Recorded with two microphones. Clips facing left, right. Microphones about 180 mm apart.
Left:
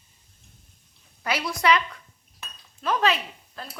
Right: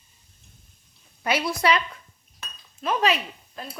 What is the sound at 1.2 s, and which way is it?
Speech, 25° right (ahead or behind).